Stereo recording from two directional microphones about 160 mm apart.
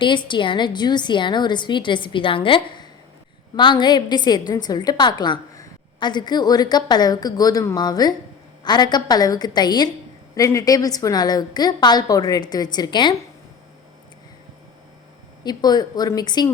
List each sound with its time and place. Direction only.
0.0 s a woman's voice: 30° left (ahead or behind)
15.4 s a woman's voice: 25° left (ahead or behind)